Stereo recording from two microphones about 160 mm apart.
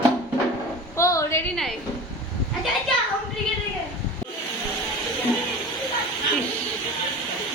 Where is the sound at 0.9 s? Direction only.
20° left (ahead or behind).